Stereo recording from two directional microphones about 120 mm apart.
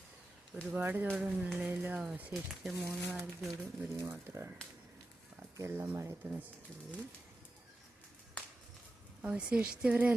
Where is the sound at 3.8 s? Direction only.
25° right (ahead or behind).